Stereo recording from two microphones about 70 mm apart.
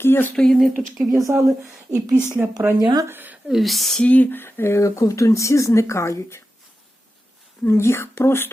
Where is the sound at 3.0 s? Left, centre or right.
Right.